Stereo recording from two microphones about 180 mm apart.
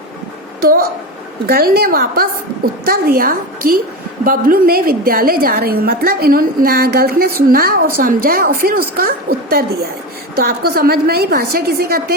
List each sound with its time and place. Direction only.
1.5 s a woman's voice: 60° right (ahead or behind)